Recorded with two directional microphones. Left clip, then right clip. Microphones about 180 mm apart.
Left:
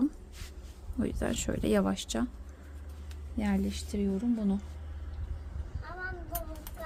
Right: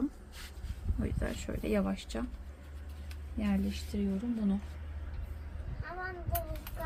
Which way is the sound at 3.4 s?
45° left (ahead or behind).